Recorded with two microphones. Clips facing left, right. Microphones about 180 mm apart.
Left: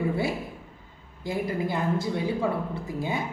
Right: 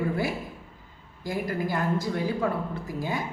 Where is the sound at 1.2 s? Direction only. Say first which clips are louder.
Left 1 dB; 25° left (ahead or behind).